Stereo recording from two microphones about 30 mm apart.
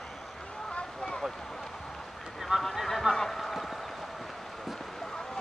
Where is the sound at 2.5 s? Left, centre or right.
Centre.